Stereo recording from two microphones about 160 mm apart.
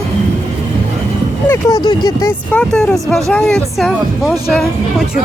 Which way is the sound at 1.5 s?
25° left (ahead or behind).